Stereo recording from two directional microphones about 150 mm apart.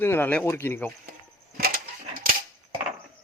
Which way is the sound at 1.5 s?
80° right.